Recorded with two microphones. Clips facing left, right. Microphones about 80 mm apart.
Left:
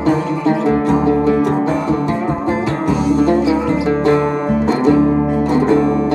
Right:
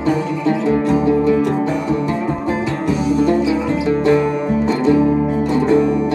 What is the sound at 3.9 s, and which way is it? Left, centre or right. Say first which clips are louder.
Music: right 1 dB; left.